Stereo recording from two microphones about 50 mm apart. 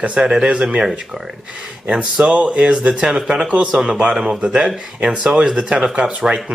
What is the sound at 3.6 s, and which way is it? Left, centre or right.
Speech, centre.